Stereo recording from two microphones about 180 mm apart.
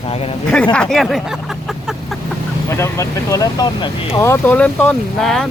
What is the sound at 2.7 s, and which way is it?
Speech, 15° left (ahead or behind).